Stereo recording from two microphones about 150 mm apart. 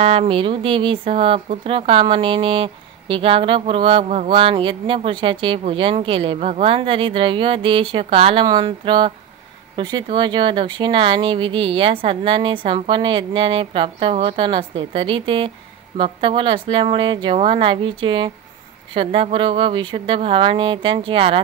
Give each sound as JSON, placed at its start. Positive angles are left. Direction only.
{"t": 0.0, "sound": "speech", "side_deg": -45}